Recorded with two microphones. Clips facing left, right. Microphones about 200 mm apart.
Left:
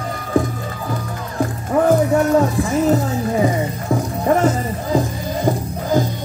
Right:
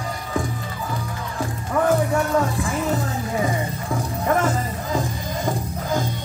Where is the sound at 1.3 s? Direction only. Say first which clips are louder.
Left 6 dB; 35° left (ahead or behind).